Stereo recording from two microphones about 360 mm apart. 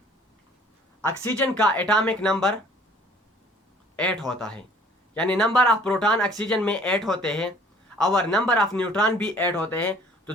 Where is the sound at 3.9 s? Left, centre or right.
Centre.